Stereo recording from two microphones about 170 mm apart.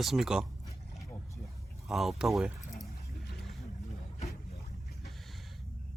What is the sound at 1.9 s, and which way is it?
Speech, centre (ahead or behind).